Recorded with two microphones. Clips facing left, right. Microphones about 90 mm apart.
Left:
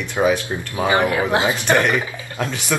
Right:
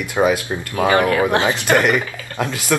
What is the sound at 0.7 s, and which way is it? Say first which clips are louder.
Speech: right 2 dB; 20° left (ahead or behind).